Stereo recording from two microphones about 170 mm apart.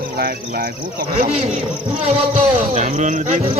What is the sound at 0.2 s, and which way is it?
Speech, 60° right (ahead or behind).